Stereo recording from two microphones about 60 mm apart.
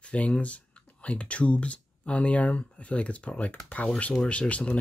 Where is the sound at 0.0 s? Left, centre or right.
Centre.